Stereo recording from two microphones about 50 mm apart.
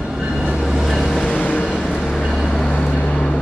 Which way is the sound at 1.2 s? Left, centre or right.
Left.